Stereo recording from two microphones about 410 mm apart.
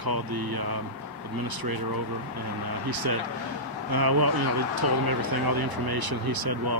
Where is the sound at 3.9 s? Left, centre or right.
Right.